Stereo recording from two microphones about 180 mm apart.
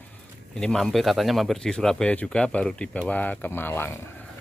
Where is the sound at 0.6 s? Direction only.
5° left (ahead or behind).